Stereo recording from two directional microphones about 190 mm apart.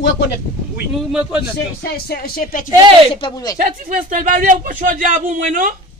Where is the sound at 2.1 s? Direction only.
50° left (ahead or behind).